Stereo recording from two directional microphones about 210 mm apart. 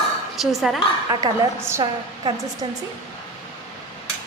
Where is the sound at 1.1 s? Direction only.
15° right (ahead or behind).